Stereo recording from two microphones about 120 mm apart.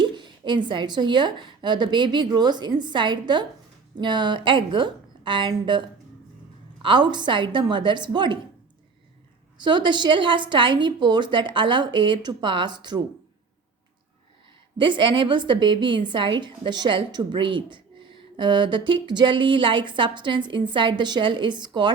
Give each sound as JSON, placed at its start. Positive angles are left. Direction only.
{"t": 0.0, "sound": "a woman's voice", "side_deg": -40}
{"t": 6.8, "sound": "a woman's voice", "side_deg": -40}
{"t": 9.6, "sound": "a woman's voice", "side_deg": -40}
{"t": 14.8, "sound": "a woman's voice", "side_deg": -40}